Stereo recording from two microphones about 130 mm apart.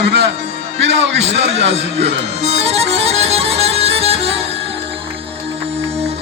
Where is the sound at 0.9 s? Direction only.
55° right (ahead or behind).